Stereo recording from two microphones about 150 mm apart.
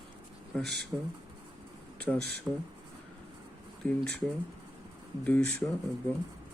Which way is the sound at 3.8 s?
10° left (ahead or behind).